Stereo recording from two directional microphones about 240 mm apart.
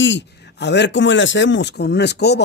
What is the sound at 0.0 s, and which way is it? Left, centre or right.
Speech, left.